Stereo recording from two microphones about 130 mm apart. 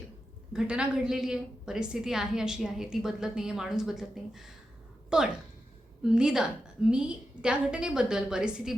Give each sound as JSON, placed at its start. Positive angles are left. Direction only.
{"t": 0.5, "sound": "a woman's voice", "side_deg": -5}